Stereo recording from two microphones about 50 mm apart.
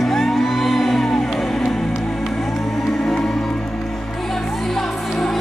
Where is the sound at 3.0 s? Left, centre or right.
Centre.